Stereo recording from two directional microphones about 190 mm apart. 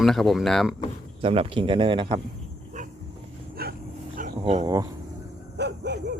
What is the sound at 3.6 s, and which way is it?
Dog, 55° right (ahead or behind).